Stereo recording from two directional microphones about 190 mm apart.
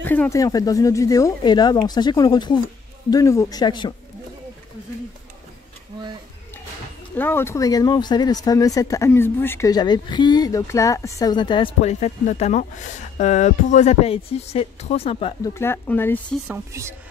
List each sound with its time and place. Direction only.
0.0 s speech: 10° left (ahead or behind)
7.2 s speech: 10° left (ahead or behind); by 15.3 s 30° left (ahead or behind)
15.4 s speech: 15° left (ahead or behind)
16.4 s speech: 15° right (ahead or behind)